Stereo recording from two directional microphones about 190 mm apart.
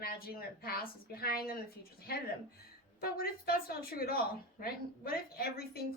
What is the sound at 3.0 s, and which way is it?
A woman's voice, 55° left (ahead or behind).